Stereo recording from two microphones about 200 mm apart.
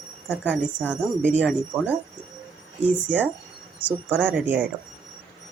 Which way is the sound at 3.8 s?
10° right (ahead or behind).